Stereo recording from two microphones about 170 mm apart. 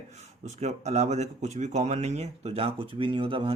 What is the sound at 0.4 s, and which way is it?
Speech, 40° right (ahead or behind).